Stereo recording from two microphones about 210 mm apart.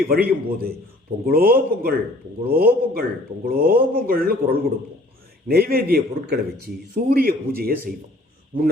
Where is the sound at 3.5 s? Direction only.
45° right (ahead or behind).